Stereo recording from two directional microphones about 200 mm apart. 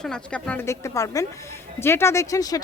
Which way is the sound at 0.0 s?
5° left (ahead or behind).